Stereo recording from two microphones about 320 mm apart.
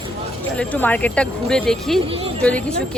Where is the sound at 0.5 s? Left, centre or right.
Centre.